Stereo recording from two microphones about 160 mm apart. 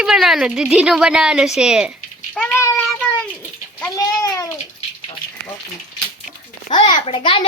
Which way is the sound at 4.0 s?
25° left (ahead or behind).